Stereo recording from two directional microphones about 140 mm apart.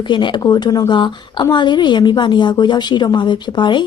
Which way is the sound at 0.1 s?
35° left (ahead or behind).